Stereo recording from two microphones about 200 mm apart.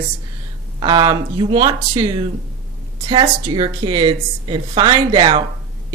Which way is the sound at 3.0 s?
25° right (ahead or behind).